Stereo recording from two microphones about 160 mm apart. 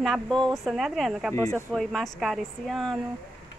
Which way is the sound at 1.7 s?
Centre (ahead or behind).